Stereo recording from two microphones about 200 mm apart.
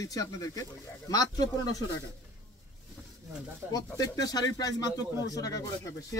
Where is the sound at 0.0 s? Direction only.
15° left (ahead or behind).